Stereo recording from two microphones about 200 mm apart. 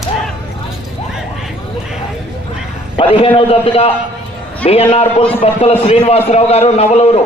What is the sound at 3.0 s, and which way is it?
A man's voice, 25° left (ahead or behind).